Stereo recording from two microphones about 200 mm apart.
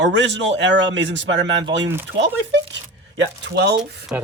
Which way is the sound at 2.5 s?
65° right (ahead or behind).